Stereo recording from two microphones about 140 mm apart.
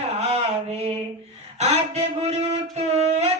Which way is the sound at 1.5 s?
50° right (ahead or behind).